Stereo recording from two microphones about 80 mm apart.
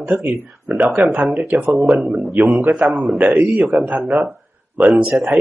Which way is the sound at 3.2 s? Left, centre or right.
Centre.